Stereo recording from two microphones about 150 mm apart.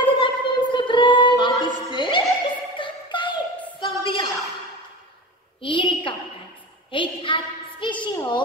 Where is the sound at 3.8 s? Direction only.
35° left (ahead or behind).